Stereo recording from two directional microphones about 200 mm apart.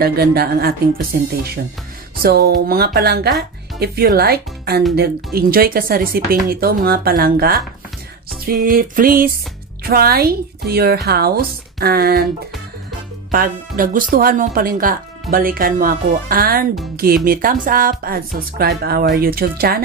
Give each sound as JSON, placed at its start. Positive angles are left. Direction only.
{"t": 0.0, "sound": "speech", "side_deg": -50}
{"t": 13.3, "sound": "speech", "side_deg": -45}